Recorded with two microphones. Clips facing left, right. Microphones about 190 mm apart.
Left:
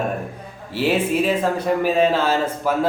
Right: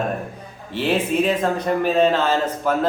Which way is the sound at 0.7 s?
5° left (ahead or behind).